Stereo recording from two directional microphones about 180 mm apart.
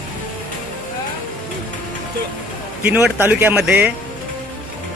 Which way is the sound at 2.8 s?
10° right (ahead or behind).